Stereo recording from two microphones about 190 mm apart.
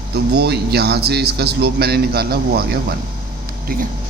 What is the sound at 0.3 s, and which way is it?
A man's voice, 60° right (ahead or behind).